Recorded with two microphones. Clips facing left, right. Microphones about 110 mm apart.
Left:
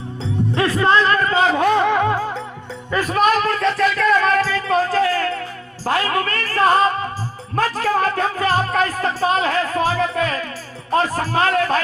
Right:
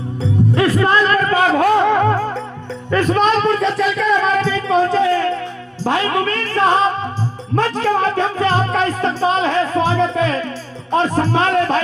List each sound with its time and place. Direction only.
0.5 s a man's voice: 30° left (ahead or behind)
1.5 s a sound: 25° right (ahead or behind)
2.0 s music: 10° left (ahead or behind)
5.8 s speech: 5° left (ahead or behind)
7.5 s music: 5° left (ahead or behind)